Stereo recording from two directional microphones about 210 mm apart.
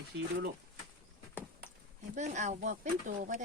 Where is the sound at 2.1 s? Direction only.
35° right (ahead or behind).